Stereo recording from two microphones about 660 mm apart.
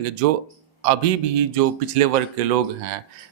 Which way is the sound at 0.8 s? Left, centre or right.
Right.